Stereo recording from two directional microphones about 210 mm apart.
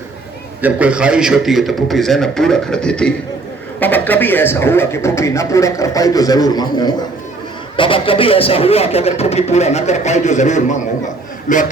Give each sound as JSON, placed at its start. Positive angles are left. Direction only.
{"t": 0.6, "sound": "a man's voice", "side_deg": -5}